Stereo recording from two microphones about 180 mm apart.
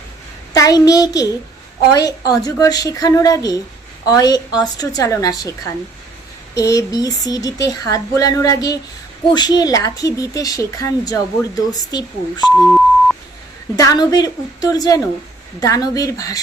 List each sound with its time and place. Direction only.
0.5 s a woman's voice: 20° left (ahead or behind)
12.5 s beep: centre (ahead or behind)
13.7 s speech: 25° left (ahead or behind)